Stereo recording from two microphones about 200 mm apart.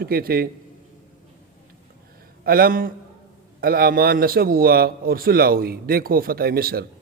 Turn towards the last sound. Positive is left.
turn(degrees=-50)  # may be behind; listen again after turning